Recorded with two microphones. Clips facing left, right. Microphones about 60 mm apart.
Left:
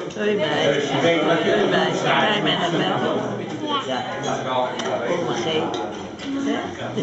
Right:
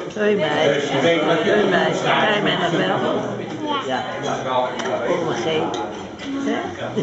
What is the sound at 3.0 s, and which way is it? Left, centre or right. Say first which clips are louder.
Speech: right 1 dB; centre.